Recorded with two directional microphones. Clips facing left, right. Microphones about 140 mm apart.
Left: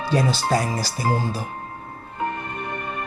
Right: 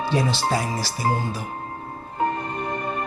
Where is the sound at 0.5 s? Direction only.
45° left (ahead or behind).